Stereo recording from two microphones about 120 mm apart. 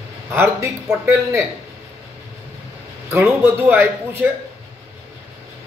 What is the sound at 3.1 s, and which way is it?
A man's voice, 20° right (ahead or behind).